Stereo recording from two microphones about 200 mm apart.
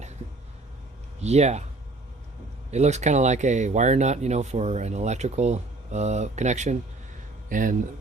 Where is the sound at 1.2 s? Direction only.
35° right (ahead or behind).